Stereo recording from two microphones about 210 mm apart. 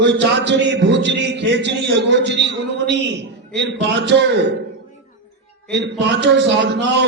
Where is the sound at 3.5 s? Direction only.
55° right (ahead or behind).